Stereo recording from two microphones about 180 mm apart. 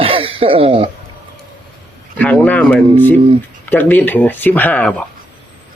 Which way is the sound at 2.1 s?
10° left (ahead or behind).